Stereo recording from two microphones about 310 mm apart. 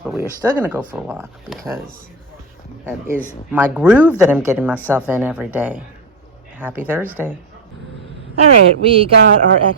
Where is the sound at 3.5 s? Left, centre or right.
Centre.